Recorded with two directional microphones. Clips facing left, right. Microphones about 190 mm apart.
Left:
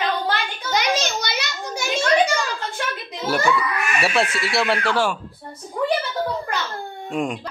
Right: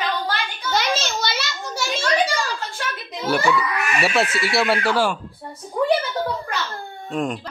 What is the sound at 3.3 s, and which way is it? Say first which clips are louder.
Speech: right 1 dB; centre (ahead or behind).